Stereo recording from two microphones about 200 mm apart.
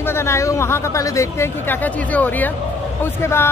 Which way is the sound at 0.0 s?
10° left (ahead or behind).